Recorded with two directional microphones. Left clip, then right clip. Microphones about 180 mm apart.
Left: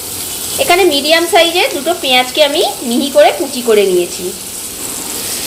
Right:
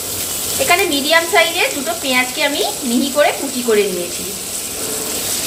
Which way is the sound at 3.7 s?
30° left (ahead or behind).